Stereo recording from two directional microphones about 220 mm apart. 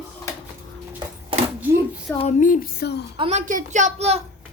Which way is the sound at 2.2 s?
35° left (ahead or behind).